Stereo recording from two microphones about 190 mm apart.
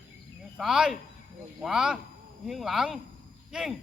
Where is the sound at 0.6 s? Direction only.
5° right (ahead or behind).